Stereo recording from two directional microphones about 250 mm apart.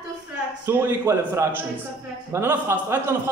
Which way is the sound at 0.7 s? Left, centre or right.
Centre.